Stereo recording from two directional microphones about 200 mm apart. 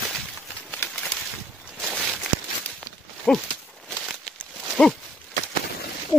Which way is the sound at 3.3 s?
Centre (ahead or behind).